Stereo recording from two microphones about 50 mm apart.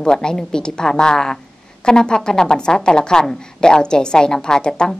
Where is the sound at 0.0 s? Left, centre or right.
Centre.